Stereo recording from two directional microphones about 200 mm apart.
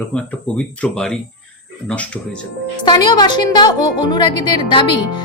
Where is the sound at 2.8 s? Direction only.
20° left (ahead or behind).